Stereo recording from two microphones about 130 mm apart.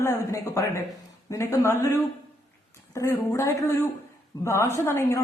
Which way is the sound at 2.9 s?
20° left (ahead or behind).